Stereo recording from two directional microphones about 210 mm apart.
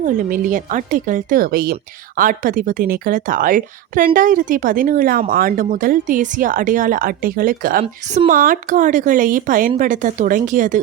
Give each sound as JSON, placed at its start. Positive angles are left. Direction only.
{"t": 0.0, "sound": "a woman's voice", "side_deg": -40}